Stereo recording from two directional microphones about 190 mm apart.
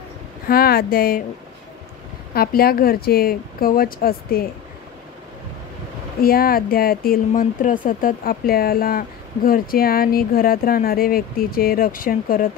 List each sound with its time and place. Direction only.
0.5 s speech: 50° left (ahead or behind)
2.3 s speech: 55° left (ahead or behind)
6.2 s speech: 50° left (ahead or behind)